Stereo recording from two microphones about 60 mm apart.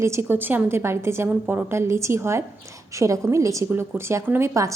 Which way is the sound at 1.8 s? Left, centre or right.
Right.